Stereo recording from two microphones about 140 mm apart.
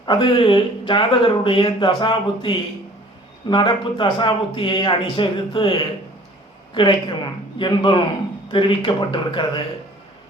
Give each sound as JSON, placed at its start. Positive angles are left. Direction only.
{"t": 0.0, "sound": "speech", "side_deg": 35}